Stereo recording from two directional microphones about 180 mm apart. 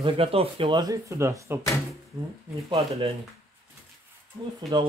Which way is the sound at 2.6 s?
30° right (ahead or behind).